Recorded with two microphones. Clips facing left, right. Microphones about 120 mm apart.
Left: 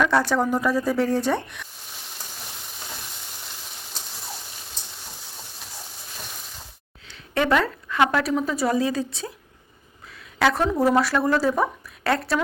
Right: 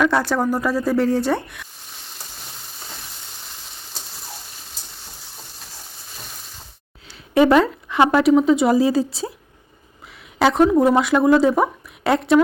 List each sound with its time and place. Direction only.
0.0 s speech: 15° right (ahead or behind)
7.4 s speech: 25° right (ahead or behind)
10.3 s a woman's voice: 20° right (ahead or behind)